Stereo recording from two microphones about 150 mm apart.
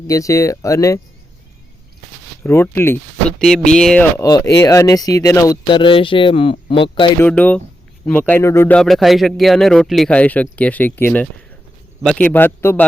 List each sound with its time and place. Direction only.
0.1 s speech: 20° left (ahead or behind)
2.4 s a man's voice: 15° left (ahead or behind)
3.3 s speech: 5° left (ahead or behind)
4.2 s speech: 25° left (ahead or behind)
5.7 s speech: 35° left (ahead or behind)
7.2 s a man's voice: 10° left (ahead or behind)